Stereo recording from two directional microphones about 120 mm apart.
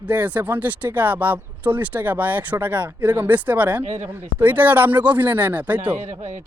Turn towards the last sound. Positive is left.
turn(degrees=-90)